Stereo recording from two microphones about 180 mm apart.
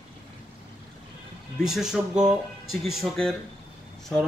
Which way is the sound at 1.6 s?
5° right (ahead or behind).